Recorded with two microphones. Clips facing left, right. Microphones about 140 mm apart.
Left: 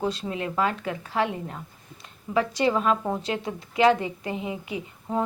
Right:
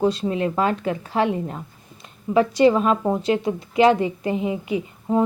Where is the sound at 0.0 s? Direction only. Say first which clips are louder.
Right 7 dB; 25° right (ahead or behind).